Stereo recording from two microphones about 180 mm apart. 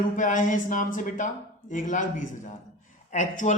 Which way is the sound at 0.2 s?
45° left (ahead or behind).